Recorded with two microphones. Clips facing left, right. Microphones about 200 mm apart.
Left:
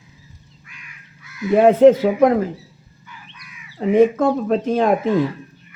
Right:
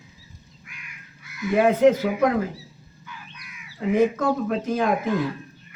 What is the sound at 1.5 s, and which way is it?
Speech, 30° left (ahead or behind).